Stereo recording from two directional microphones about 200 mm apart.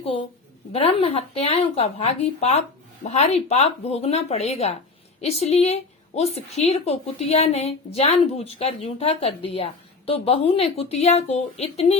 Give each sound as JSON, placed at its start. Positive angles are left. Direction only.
{"t": 0.7, "sound": "a woman's voice", "side_deg": 30}